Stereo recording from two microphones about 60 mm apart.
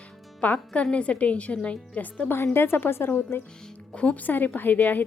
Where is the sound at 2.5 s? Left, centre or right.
Left.